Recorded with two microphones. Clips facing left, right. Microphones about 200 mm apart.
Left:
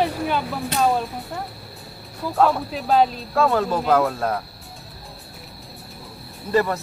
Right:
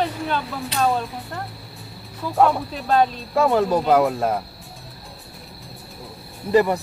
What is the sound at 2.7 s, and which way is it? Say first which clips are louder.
Speech: left 1 dB; 5° left (ahead or behind).